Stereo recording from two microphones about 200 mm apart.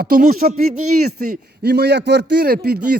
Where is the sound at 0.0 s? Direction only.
45° right (ahead or behind).